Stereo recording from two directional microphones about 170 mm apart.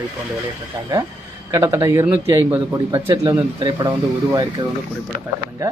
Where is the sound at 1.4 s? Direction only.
20° right (ahead or behind).